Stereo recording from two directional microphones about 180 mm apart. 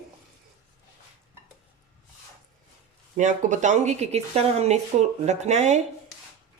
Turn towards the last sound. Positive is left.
turn(degrees=-40)  # may be behind; listen again after turning